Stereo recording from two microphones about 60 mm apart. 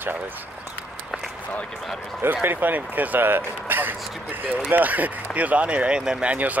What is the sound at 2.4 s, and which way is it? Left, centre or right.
A man's voice, right.